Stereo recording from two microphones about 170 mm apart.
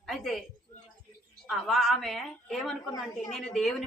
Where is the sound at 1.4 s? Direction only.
Centre (ahead or behind).